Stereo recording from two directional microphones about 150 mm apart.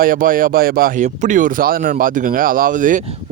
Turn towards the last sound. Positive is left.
turn(degrees=-60)  # may be behind; listen again after turning